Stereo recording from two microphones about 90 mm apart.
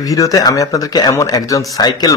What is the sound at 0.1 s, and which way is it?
A man's voice, 40° left (ahead or behind).